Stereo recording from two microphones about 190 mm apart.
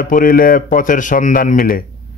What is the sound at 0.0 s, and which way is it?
A man's voice, 45° left (ahead or behind).